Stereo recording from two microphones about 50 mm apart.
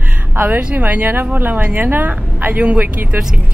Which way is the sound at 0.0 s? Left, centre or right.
Right.